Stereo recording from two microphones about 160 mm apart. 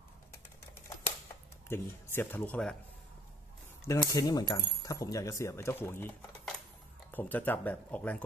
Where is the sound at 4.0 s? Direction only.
20° left (ahead or behind).